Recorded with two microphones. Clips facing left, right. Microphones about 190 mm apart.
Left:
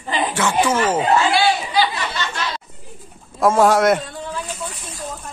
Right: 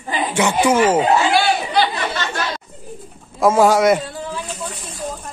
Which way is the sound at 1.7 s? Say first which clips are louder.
Right 1 dB; 45° right (ahead or behind).